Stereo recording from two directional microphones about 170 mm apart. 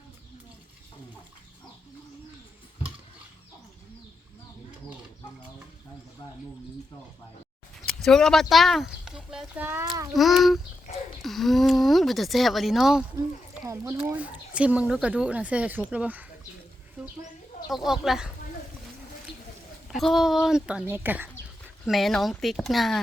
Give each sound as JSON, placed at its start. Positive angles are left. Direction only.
{"t": 7.9, "sound": "a sound", "side_deg": 5}
{"t": 10.2, "sound": "speech", "side_deg": 0}
{"t": 13.7, "sound": "speech", "side_deg": -20}
{"t": 14.0, "sound": "speech", "side_deg": -10}
{"t": 17.0, "sound": "a sound", "side_deg": -5}
{"t": 17.7, "sound": "speech", "side_deg": 0}
{"t": 19.9, "sound": "speech", "side_deg": 0}
{"t": 21.8, "sound": "speech", "side_deg": 0}